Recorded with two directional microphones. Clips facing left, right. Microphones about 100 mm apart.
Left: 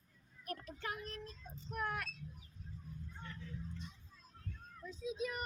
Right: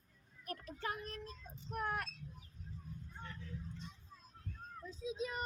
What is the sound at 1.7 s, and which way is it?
Speech, 40° right (ahead or behind).